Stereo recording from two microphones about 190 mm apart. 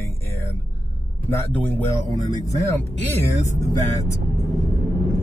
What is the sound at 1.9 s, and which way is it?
Speech, 15° left (ahead or behind).